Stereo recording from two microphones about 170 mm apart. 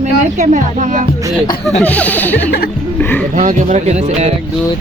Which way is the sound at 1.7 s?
10° left (ahead or behind).